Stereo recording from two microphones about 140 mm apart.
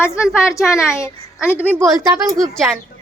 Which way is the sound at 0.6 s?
5° right (ahead or behind).